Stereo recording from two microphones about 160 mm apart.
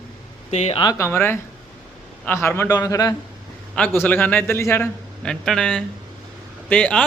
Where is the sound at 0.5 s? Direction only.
45° left (ahead or behind).